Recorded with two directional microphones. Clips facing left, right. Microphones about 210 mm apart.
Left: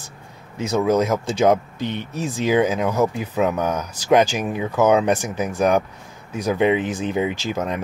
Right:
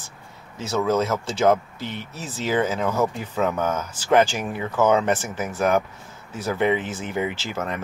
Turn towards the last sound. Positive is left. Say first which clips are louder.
# left 4 dB
turn(degrees=15)  # may be behind; listen again after turning